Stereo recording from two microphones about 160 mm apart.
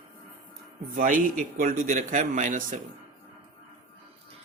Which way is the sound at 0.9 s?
55° right (ahead or behind).